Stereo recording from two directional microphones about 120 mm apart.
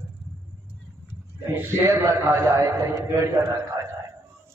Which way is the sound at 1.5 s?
20° right (ahead or behind).